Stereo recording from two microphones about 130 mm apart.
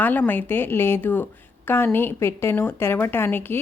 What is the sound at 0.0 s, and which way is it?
A woman's voice, 15° left (ahead or behind).